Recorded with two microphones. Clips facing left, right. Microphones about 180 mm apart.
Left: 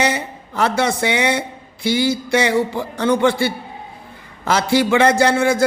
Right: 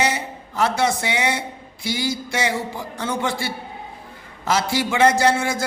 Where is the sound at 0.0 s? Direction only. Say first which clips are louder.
Left 3 dB; 60° left (ahead or behind).